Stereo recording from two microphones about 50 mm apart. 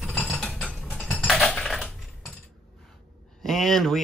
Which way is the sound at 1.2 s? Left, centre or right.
Centre.